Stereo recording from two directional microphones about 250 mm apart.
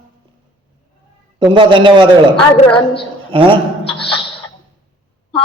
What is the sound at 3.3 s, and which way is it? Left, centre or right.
Speech, right.